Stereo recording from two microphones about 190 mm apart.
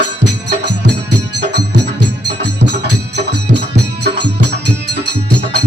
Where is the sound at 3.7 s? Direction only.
60° right (ahead or behind).